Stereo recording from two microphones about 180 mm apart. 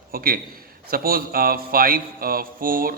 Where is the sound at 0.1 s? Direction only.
55° right (ahead or behind).